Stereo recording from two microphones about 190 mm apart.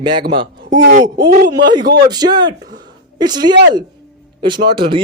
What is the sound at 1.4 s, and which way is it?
Speech, 65° right (ahead or behind).